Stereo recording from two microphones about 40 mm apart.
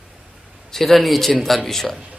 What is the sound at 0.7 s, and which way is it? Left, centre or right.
A man's voice, centre.